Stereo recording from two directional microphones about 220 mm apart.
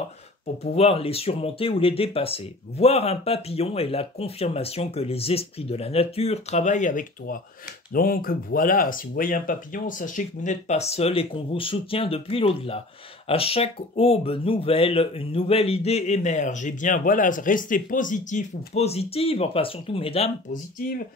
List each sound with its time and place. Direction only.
0.7 s speech: 25° left (ahead or behind)